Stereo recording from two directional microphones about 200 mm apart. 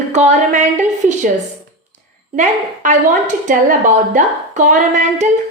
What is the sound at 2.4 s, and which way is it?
A woman's voice, 40° right (ahead or behind).